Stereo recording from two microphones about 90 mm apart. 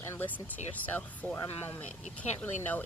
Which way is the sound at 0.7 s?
20° left (ahead or behind).